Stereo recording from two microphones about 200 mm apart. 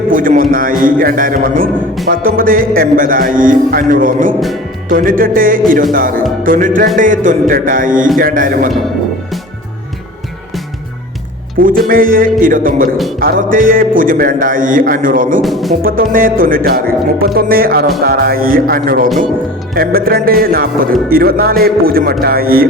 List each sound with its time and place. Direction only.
0.1 s a man's voice: 45° right (ahead or behind)
11.9 s speech: 45° right (ahead or behind)
15.4 s speech: centre (ahead or behind)
15.8 s speech: 45° right (ahead or behind)